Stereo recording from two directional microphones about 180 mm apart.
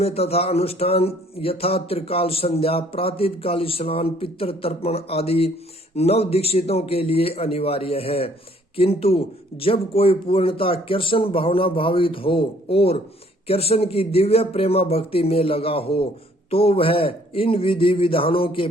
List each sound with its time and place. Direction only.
0.0 s speech: 35° left (ahead or behind)